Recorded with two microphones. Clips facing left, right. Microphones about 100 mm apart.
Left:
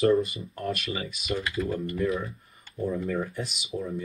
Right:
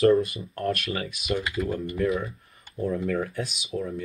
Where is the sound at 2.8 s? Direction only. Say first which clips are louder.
Right 2 dB; 5° left (ahead or behind).